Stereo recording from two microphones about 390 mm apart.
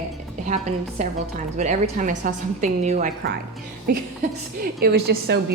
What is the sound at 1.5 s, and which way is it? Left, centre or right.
A woman's voice, centre.